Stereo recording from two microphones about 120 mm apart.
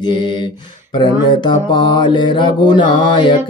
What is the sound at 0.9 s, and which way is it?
Mantra, 40° left (ahead or behind).